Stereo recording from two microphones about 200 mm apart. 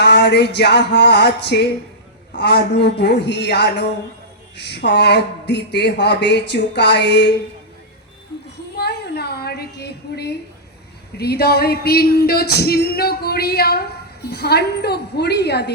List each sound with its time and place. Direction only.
0.0 s speech: 60° left (ahead or behind)
8.7 s a sound: 55° left (ahead or behind)
14.3 s speech: 55° left (ahead or behind)